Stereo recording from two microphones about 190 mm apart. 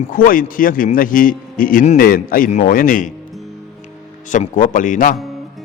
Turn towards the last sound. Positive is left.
turn(degrees=45)  # may be behind; listen again after turning